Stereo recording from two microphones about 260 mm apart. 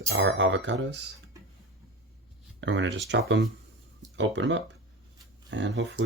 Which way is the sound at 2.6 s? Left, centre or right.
Right.